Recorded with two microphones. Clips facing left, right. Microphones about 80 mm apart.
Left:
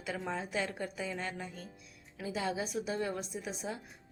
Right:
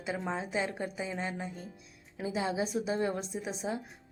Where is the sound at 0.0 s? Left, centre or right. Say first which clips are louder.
Right 3 dB; right.